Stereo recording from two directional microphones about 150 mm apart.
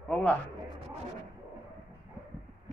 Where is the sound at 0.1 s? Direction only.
10° left (ahead or behind).